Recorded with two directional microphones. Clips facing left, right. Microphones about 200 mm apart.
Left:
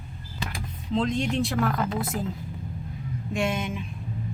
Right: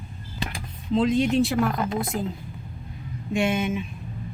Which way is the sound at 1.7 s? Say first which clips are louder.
Right 1 dB; 20° right (ahead or behind).